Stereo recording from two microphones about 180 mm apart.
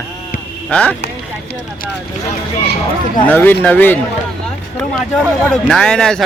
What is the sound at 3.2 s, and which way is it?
A man's voice, 10° left (ahead or behind).